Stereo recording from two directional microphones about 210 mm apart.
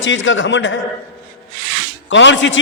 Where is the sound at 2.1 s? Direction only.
60° left (ahead or behind).